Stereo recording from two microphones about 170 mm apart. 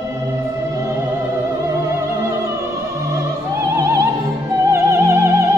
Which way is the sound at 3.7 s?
15° right (ahead or behind).